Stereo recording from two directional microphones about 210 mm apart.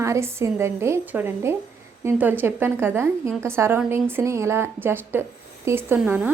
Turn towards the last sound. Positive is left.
turn(degrees=-10)  # may be behind; listen again after turning